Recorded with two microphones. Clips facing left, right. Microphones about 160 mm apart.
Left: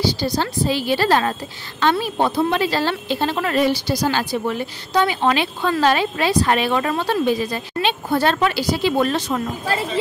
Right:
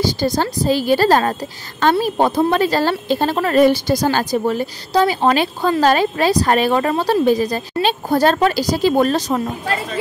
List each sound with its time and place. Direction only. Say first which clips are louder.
0.0 s a woman's voice: right 3 dB; 45° right (ahead or behind)